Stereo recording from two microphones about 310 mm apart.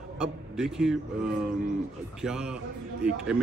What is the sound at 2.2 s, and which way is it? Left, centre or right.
Speech, centre.